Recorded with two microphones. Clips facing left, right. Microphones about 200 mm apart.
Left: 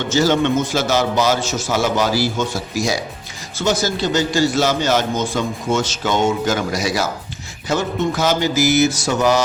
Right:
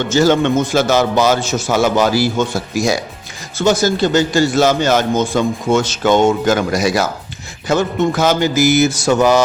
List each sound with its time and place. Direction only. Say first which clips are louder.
0.1 s a man's voice: right 3 dB; 50° right (ahead or behind)
3.6 s a man's voice: right 5 dB; 50° right (ahead or behind)